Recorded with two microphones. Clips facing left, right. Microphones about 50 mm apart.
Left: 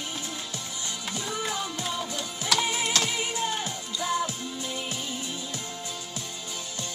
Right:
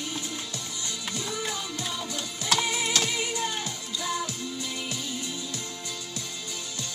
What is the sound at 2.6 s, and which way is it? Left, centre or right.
Music, left.